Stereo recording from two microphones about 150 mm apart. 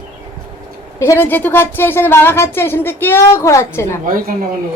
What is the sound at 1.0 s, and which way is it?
A woman's voice, 15° left (ahead or behind).